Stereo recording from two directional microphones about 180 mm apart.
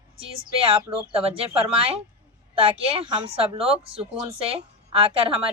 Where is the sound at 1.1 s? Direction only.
30° right (ahead or behind).